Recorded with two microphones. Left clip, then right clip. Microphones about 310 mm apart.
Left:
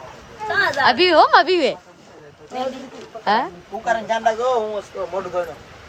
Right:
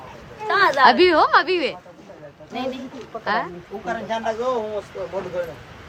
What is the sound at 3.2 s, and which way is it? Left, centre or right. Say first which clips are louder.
Speech: left 4 dB; centre.